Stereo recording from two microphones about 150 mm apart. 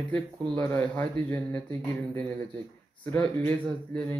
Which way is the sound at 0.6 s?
10° left (ahead or behind).